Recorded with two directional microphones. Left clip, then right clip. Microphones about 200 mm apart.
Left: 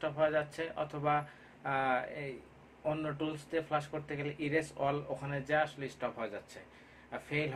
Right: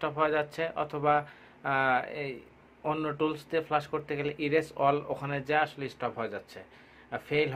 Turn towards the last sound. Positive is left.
turn(degrees=-50)  # may be behind; listen again after turning